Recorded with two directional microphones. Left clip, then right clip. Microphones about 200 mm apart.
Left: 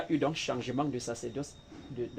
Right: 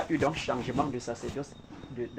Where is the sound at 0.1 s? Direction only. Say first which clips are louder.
Even; 15° left (ahead or behind).